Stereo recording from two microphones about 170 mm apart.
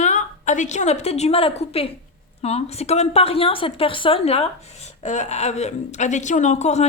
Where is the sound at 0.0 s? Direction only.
45° left (ahead or behind).